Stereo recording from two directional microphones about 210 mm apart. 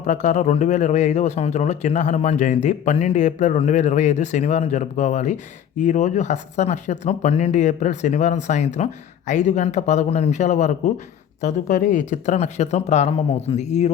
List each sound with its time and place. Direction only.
0.0 s speech: 35° left (ahead or behind)